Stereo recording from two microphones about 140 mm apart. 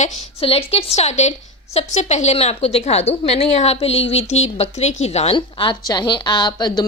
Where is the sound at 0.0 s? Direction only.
45° left (ahead or behind).